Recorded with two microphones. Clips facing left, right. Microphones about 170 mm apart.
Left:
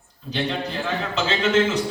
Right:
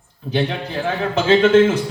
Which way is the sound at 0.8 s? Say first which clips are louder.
Right 9 dB; 55° right (ahead or behind).